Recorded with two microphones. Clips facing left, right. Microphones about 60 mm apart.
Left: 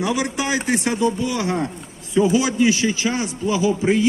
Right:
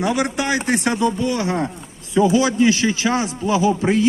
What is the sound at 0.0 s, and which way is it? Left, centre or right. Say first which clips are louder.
Speech: right 2 dB; right.